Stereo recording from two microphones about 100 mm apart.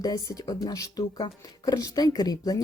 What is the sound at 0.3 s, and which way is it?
Speech, 35° left (ahead or behind).